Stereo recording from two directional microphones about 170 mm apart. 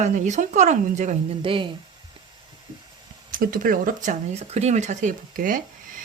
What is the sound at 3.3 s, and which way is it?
A woman's voice, 55° right (ahead or behind).